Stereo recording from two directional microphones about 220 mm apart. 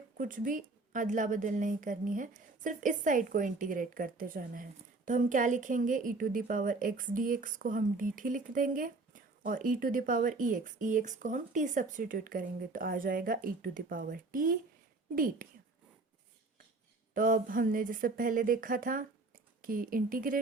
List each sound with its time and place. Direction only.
0.2 s a woman's voice: 40° right (ahead or behind)
17.2 s a woman's voice: 40° right (ahead or behind)